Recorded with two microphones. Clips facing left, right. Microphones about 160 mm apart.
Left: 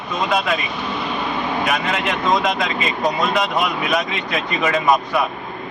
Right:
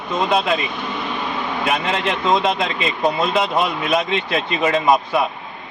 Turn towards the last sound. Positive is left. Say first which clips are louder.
# right 1 dB
turn(degrees=-25)  # may be behind; listen again after turning